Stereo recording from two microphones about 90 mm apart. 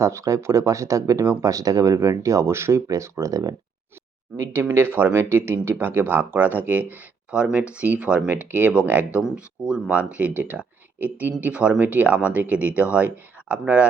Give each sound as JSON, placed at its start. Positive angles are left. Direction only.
{"t": 0.0, "sound": "speech", "side_deg": -35}
{"t": 4.9, "sound": "speech", "side_deg": -25}